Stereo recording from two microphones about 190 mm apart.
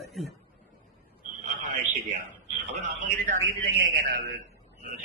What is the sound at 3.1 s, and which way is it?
A man's voice, 45° right (ahead or behind).